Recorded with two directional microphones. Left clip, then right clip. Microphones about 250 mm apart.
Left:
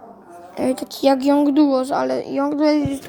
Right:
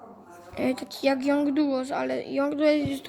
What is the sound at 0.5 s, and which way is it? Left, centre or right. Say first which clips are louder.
A child's voice: left 6 dB; centre.